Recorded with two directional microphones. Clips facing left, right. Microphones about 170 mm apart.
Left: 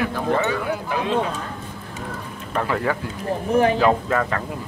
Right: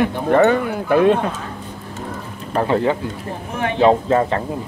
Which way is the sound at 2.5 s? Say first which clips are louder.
Right 5 dB; 30° right (ahead or behind).